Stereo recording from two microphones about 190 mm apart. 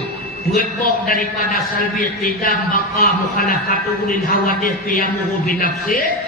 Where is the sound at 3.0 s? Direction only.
50° left (ahead or behind).